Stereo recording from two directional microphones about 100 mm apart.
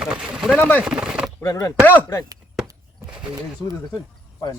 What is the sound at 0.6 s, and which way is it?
Speech, 20° left (ahead or behind).